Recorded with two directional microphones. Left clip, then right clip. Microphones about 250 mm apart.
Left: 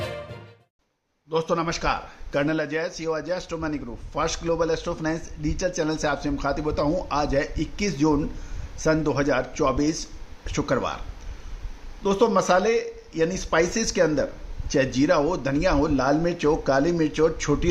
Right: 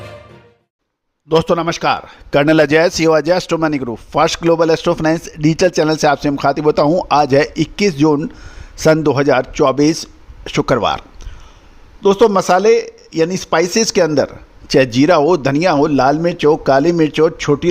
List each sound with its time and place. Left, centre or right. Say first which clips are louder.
1.3 s a man's voice: right 10 dB; right
12.0 s a man's voice: right 9 dB; right